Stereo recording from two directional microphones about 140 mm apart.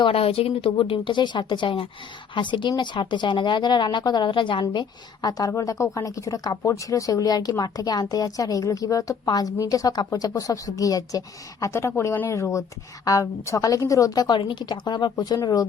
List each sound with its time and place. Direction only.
0.0 s speech: 45° left (ahead or behind); by 15.6 s 25° left (ahead or behind)